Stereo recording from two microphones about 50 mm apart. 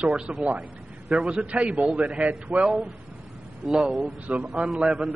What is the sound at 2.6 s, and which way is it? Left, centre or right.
Speech, centre.